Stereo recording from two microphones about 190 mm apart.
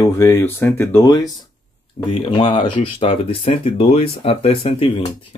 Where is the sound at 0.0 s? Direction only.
15° left (ahead or behind).